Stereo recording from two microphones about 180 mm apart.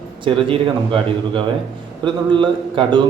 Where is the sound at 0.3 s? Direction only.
30° right (ahead or behind).